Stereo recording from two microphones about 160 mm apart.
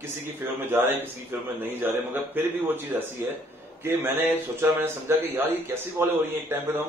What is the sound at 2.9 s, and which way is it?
A man's voice, 15° right (ahead or behind).